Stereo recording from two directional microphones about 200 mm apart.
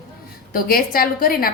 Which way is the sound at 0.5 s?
45° left (ahead or behind).